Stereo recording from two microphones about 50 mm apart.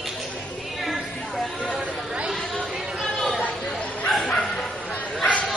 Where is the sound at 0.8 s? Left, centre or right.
Centre.